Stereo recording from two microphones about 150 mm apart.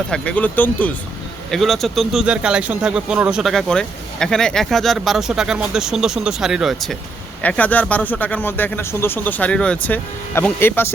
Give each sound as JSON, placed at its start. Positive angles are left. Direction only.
{"t": 0.1, "sound": "speech", "side_deg": 10}
{"t": 7.4, "sound": "speech", "side_deg": 10}